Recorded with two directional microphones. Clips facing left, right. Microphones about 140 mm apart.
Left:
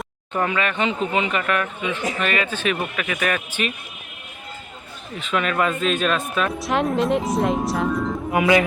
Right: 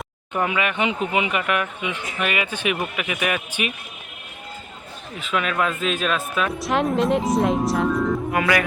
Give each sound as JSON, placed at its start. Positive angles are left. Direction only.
{"t": 0.3, "sound": "speech", "side_deg": -10}
{"t": 5.1, "sound": "speech", "side_deg": 0}
{"t": 8.3, "sound": "speech", "side_deg": 20}